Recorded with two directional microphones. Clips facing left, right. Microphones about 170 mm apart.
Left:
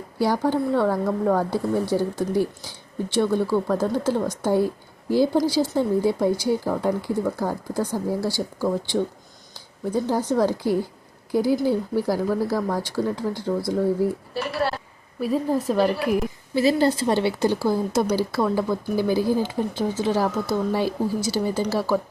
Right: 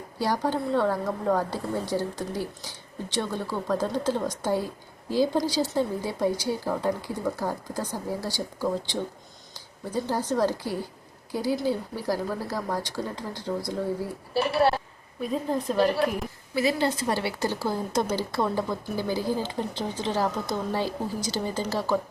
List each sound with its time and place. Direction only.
0.5 s speech: 10° left (ahead or behind)
14.3 s a woman's voice: 25° right (ahead or behind)
15.2 s speech: 5° left (ahead or behind)
16.6 s a woman's voice: 35° left (ahead or behind)
17.1 s speech: 20° left (ahead or behind)